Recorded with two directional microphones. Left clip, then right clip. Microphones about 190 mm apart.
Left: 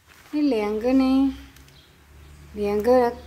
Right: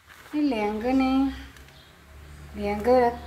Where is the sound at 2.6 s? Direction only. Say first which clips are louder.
Left 2 dB; 30° left (ahead or behind).